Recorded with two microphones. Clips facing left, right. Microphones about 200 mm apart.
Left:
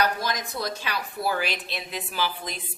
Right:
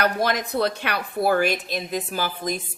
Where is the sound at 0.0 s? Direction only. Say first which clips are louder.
Right 4 dB; 60° right (ahead or behind).